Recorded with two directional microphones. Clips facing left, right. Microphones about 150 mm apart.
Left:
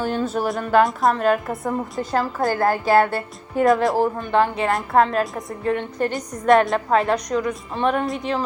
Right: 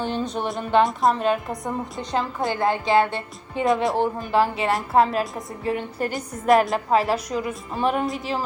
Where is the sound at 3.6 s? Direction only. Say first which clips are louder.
Left 3 dB; centre (ahead or behind).